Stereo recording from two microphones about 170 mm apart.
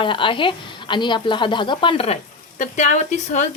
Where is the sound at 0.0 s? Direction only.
30° left (ahead or behind).